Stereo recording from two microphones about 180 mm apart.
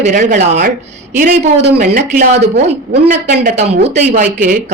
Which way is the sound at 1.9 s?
45° right (ahead or behind).